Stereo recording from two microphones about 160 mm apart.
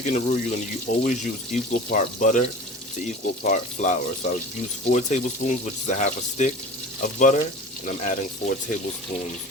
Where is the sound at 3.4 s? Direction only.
50° left (ahead or behind).